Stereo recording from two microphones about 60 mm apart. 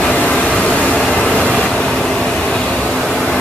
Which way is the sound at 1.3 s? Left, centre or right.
Centre.